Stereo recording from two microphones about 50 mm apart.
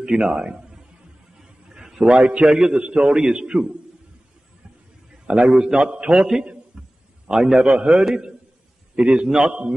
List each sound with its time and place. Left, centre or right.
0.0 s a man's voice: centre
1.4 s a sound: centre
2.8 s a man's voice: centre
5.2 s a man's voice: centre